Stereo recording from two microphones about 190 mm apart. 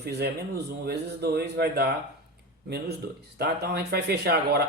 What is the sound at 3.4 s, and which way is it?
A man's voice, 60° right (ahead or behind).